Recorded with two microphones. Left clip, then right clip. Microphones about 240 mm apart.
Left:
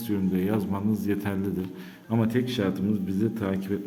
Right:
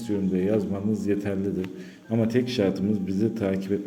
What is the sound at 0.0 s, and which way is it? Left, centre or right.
A man's voice, centre.